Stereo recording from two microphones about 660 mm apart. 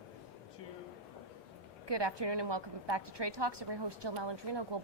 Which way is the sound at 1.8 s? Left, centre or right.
Right.